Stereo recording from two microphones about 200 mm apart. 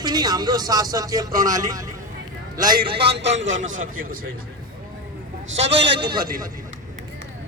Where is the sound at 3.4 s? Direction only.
40° right (ahead or behind).